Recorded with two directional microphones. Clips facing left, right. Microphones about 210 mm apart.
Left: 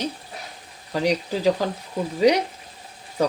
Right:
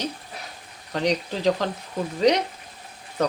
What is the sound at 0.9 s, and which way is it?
Speech, 5° left (ahead or behind).